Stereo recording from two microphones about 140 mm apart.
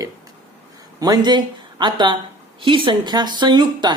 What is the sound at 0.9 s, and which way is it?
Speech, 25° right (ahead or behind).